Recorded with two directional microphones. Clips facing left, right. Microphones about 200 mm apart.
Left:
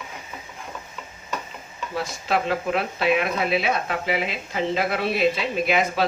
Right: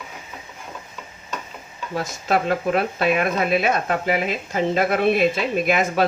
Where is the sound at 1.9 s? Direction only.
45° right (ahead or behind).